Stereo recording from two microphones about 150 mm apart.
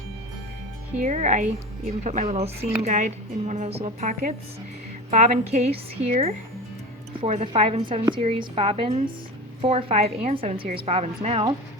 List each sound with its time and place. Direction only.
1.0 s a woman's voice: 55° right (ahead or behind)
7.2 s a woman's voice: 40° right (ahead or behind)